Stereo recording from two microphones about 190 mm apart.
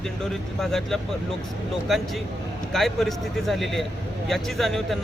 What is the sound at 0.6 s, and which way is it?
Speech, 5° left (ahead or behind).